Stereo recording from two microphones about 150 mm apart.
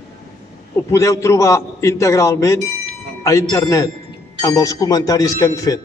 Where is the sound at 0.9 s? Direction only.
20° left (ahead or behind).